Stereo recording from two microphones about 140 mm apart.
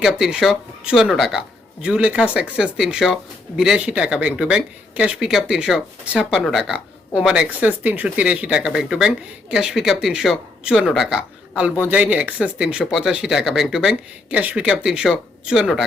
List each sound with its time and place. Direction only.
0.0 s speech: 5° right (ahead or behind)